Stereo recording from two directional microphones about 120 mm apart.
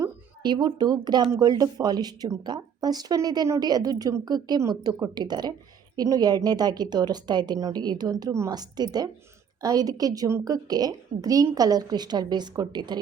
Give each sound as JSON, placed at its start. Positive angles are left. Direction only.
{"t": 0.0, "sound": "speech", "side_deg": -35}